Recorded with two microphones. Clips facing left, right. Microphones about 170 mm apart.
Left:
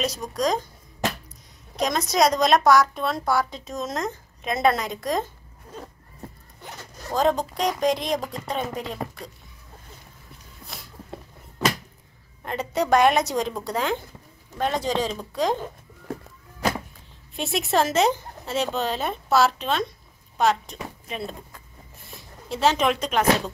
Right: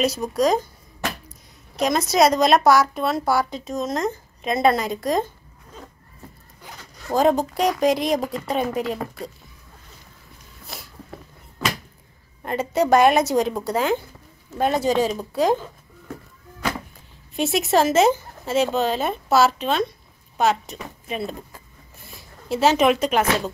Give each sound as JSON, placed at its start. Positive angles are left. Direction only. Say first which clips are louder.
{"t": 0.0, "sound": "a woman's voice", "louder": "right 5 dB", "side_deg": -5}
{"t": 1.8, "sound": "a woman's voice", "louder": "right 3 dB", "side_deg": -5}
{"t": 7.2, "sound": "a woman's voice", "louder": "right 4 dB", "side_deg": -5}
{"t": 12.4, "sound": "a woman's voice", "louder": "right 4 dB", "side_deg": -5}
{"t": 17.4, "sound": "a woman's voice", "louder": "right 4 dB", "side_deg": 0}
{"t": 22.5, "sound": "speech", "louder": "right 4 dB", "side_deg": -5}